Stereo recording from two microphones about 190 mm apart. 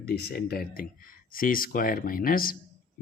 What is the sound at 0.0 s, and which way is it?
Speech, 55° left (ahead or behind).